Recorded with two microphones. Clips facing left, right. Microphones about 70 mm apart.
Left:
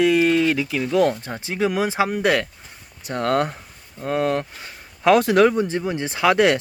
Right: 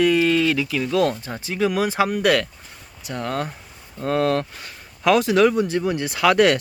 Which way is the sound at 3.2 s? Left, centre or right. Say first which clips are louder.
Left 6 dB; left.